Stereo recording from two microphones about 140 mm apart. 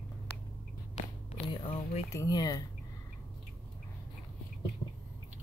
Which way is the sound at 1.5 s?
35° left (ahead or behind).